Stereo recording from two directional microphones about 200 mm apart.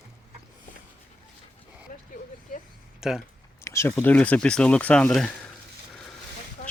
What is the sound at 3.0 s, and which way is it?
Speech, centre (ahead or behind).